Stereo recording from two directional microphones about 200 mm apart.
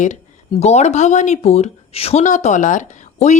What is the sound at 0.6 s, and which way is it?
Speech, 35° left (ahead or behind).